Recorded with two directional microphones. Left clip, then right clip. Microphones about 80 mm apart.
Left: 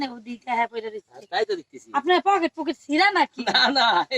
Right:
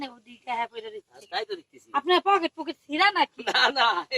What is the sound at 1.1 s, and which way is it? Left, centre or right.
Speech, centre.